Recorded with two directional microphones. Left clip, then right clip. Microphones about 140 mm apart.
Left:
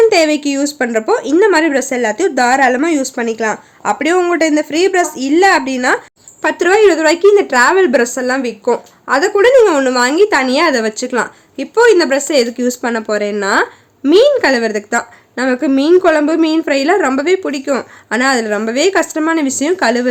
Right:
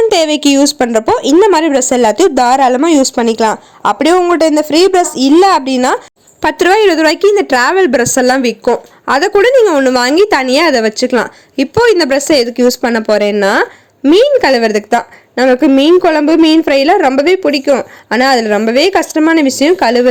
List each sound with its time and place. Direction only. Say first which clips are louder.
0.1 s speech: right 2 dB; 50° right (ahead or behind)
6.4 s a woman's voice: right 2 dB; 65° right (ahead or behind); by 20.1 s 40° right (ahead or behind)